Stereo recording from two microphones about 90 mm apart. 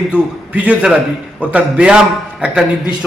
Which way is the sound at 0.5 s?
15° right (ahead or behind).